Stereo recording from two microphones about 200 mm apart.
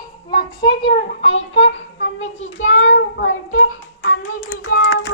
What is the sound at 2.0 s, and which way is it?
Child singing, 70° left (ahead or behind).